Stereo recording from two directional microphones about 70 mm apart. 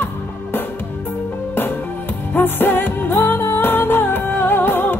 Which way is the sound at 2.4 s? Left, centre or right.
Left.